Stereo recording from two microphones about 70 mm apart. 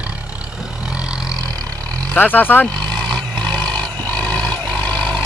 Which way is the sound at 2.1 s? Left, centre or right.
Left.